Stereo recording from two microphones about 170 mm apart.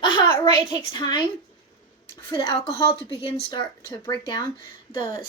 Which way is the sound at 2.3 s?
30° left (ahead or behind).